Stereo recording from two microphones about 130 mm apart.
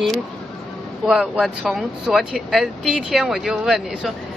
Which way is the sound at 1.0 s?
10° right (ahead or behind).